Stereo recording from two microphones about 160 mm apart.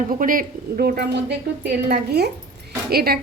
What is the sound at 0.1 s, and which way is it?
Speech, 60° right (ahead or behind).